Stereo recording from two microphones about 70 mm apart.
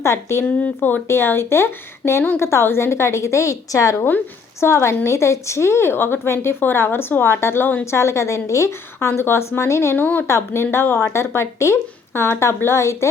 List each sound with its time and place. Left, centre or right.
0.0 s speech: left
0.4 s speech: left
1.0 s a woman's voice: left
10.0 s speech: left
10.2 s speech: left